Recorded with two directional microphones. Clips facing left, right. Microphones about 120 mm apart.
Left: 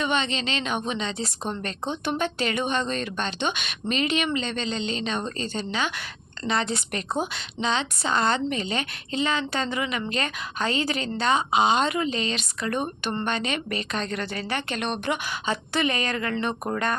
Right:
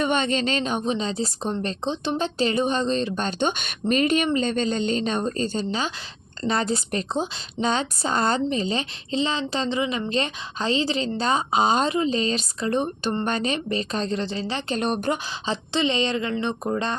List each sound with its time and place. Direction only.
0.0 s a woman's voice: 45° right (ahead or behind); by 3.2 s 30° right (ahead or behind)
3.2 s a woman's voice: 45° right (ahead or behind)
7.6 s a woman's voice: 40° right (ahead or behind); by 14.8 s 25° right (ahead or behind)
14.8 s a woman's voice: 40° right (ahead or behind)